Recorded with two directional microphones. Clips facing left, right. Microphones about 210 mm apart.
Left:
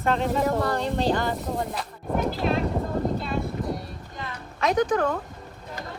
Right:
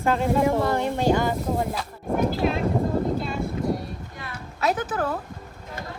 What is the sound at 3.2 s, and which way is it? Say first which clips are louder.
Music: right 1 dB; centre (ahead or behind).